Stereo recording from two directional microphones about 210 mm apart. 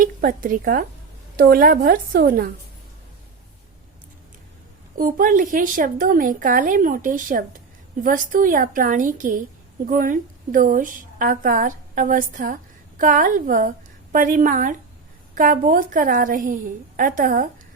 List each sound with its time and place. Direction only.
0.0 s a woman's voice: 40° right (ahead or behind)
4.9 s a woman's voice: 40° right (ahead or behind)